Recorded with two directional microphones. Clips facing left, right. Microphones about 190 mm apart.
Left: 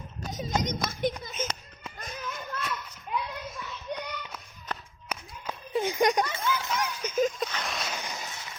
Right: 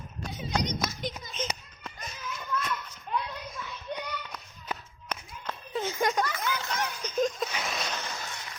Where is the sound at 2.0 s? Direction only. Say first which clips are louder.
Left 5 dB; 55° left (ahead or behind).